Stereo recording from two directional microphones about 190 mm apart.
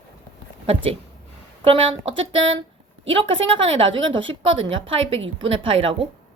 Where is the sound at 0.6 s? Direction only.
30° right (ahead or behind).